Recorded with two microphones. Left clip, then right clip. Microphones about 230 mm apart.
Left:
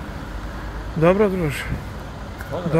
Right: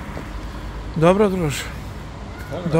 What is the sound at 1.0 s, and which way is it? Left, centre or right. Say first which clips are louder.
Speech: right 1 dB; centre.